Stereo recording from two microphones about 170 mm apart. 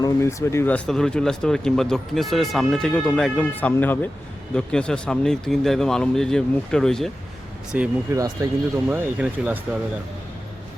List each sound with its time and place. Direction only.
0.0 s speech: 15° left (ahead or behind)
0.9 s speech: 5° left (ahead or behind)
8.1 s speech: 20° right (ahead or behind)
8.9 s speech: 10° right (ahead or behind)